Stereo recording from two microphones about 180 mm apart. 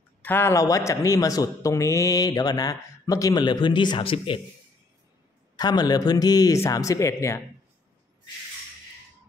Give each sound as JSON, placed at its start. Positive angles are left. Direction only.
{"t": 0.2, "sound": "speech", "side_deg": 10}
{"t": 5.6, "sound": "speech", "side_deg": 20}